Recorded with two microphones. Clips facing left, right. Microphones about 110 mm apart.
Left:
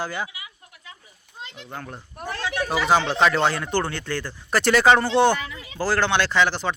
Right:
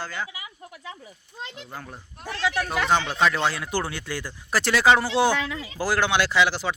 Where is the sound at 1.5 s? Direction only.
5° right (ahead or behind).